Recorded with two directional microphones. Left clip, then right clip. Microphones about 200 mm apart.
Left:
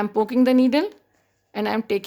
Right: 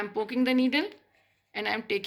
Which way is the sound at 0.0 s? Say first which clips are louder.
Left 9 dB; 55° left (ahead or behind).